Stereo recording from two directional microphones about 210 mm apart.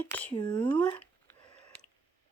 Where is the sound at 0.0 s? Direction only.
5° left (ahead or behind).